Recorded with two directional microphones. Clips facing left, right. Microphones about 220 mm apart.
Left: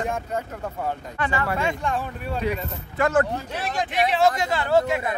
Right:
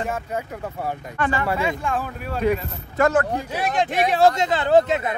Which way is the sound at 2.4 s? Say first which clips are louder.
Right 8 dB; 45° right (ahead or behind).